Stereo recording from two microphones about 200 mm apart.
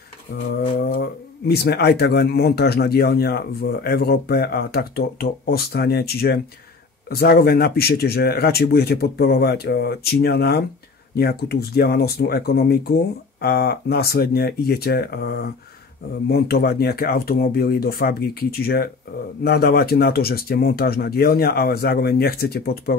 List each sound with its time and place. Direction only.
0.3 s speech: 50° left (ahead or behind)